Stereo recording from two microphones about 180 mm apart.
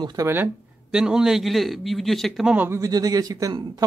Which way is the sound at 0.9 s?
5° right (ahead or behind).